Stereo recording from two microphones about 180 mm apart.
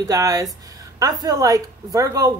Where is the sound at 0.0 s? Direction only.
20° right (ahead or behind).